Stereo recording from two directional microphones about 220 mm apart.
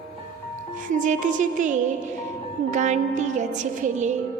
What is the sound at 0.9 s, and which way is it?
Music, 35° right (ahead or behind).